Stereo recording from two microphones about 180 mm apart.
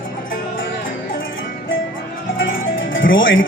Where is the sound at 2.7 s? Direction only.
90° left.